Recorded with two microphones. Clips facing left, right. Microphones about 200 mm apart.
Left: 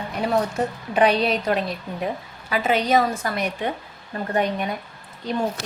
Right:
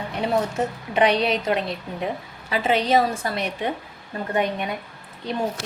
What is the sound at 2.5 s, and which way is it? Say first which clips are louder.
A woman's voice: even; 30° right (ahead or behind).